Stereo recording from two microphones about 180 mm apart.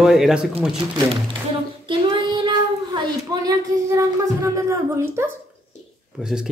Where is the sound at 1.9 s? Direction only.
25° right (ahead or behind).